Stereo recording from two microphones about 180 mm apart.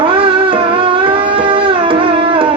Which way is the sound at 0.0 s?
30° right (ahead or behind).